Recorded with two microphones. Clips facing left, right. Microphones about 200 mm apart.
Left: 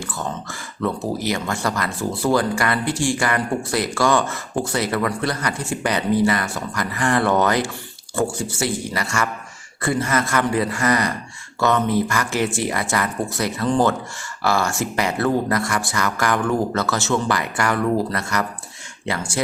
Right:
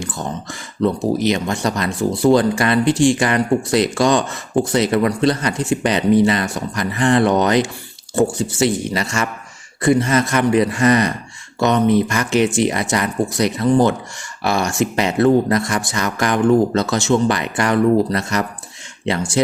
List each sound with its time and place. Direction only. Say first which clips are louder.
0.0 s speech: right 2 dB; 15° right (ahead or behind)